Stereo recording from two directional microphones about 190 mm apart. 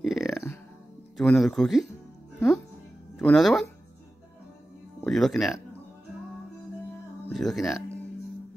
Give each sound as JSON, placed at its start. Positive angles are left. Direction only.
{"t": 0.0, "sound": "music", "side_deg": 0}
{"t": 1.1, "sound": "speech", "side_deg": 0}
{"t": 3.2, "sound": "speech", "side_deg": 5}
{"t": 5.0, "sound": "speech", "side_deg": 0}
{"t": 7.2, "sound": "speech", "side_deg": 0}